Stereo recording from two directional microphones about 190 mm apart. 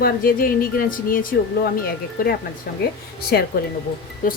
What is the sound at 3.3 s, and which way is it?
Speech, 55° left (ahead or behind).